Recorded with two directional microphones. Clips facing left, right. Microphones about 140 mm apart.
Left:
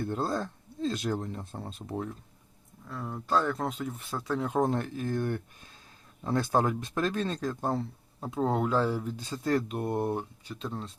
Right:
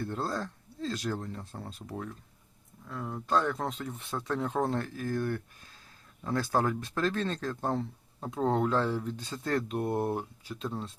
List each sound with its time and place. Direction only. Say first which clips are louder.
0.0 s speech: left 3 dB; 20° left (ahead or behind)
2.8 s speech: even; centre (ahead or behind)